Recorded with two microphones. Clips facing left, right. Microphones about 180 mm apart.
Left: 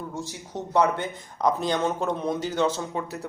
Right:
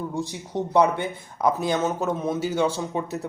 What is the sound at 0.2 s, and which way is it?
Speech, 15° right (ahead or behind).